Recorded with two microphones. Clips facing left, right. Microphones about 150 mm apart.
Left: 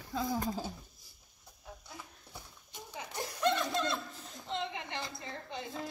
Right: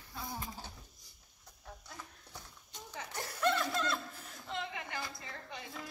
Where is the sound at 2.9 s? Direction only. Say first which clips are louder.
Left 2 dB; 15° left (ahead or behind).